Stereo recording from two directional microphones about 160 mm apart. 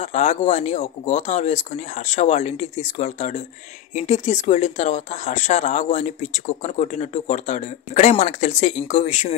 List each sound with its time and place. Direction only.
0.0 s speech: 45° left (ahead or behind)